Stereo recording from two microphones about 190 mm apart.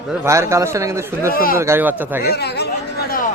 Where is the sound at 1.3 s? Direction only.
50° left (ahead or behind).